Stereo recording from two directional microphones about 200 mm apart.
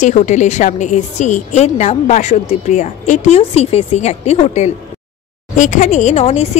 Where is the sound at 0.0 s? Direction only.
35° left (ahead or behind).